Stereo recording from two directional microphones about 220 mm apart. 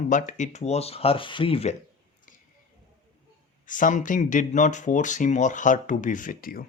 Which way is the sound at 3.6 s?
35° left (ahead or behind).